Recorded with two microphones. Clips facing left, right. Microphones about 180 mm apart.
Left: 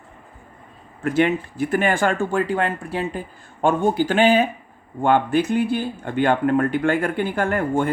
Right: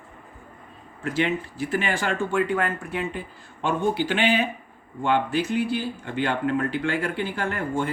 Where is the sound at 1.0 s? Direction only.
55° left (ahead or behind).